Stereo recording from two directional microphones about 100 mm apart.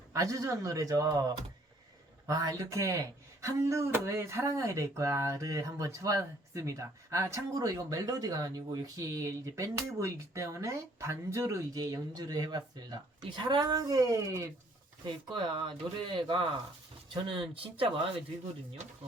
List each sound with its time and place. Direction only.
0.1 s a man's voice: 35° right (ahead or behind)
15.3 s speech: 50° right (ahead or behind)
17.5 s speech: 65° right (ahead or behind)